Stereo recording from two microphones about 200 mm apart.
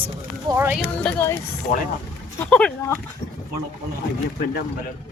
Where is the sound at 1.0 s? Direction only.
10° left (ahead or behind).